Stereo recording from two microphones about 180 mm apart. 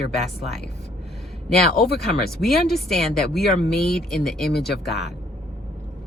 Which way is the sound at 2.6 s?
Centre (ahead or behind).